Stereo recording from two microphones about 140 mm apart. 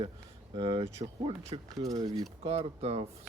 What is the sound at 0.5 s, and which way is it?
Speech, 40° right (ahead or behind).